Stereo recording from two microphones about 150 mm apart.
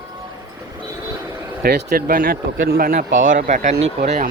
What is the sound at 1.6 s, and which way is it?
Speech, 90° right.